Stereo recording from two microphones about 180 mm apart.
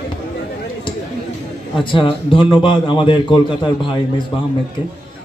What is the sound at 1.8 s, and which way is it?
A man's voice, 30° left (ahead or behind).